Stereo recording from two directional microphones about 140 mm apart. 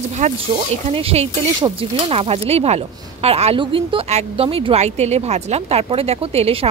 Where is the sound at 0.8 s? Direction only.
45° right (ahead or behind).